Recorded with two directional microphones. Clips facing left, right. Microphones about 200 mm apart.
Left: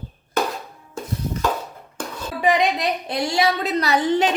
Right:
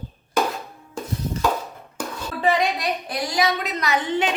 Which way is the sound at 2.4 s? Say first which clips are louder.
Left 2 dB; 20° left (ahead or behind).